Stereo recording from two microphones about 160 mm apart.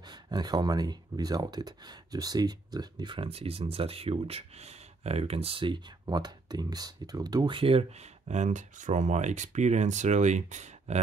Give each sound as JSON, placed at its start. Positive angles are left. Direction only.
{"t": 0.0, "sound": "speech", "side_deg": -25}